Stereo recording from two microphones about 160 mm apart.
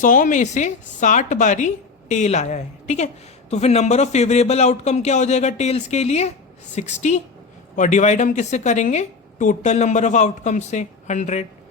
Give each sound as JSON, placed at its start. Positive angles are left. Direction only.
{"t": 0.0, "sound": "a woman's voice", "side_deg": 55}